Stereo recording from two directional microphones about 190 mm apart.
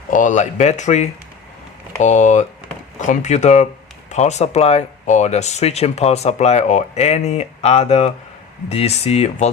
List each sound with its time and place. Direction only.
0.1 s speech: 40° left (ahead or behind)